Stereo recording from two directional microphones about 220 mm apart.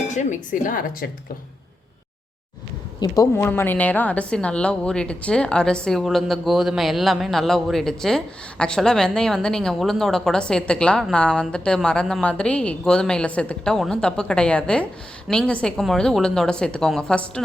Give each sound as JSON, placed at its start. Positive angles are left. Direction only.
{"t": 0.1, "sound": "speech", "side_deg": 35}
{"t": 3.0, "sound": "a woman's voice", "side_deg": 15}